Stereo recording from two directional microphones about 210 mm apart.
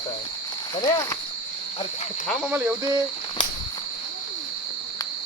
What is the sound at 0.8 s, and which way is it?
Speech, 15° left (ahead or behind).